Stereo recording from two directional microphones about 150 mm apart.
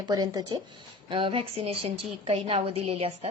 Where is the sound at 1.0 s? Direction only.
35° right (ahead or behind).